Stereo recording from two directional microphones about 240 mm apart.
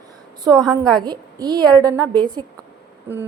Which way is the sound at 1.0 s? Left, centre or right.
Centre.